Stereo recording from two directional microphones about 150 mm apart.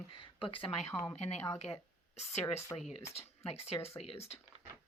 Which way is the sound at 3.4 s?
40° left (ahead or behind).